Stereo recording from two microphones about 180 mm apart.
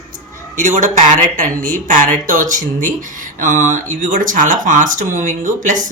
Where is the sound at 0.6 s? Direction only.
45° right (ahead or behind).